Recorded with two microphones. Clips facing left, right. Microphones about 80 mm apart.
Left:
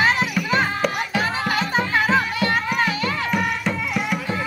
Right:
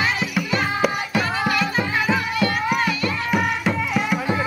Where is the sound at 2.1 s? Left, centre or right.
Left.